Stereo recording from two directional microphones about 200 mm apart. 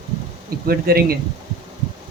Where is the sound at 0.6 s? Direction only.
50° right (ahead or behind).